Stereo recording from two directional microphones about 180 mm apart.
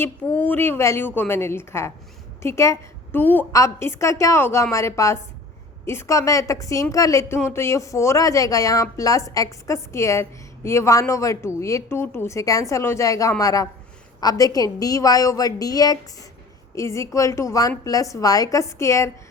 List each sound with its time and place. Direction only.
0.0 s a woman's voice: 10° left (ahead or behind)